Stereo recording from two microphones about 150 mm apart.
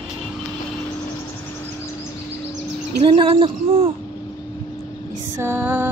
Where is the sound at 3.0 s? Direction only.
35° right (ahead or behind).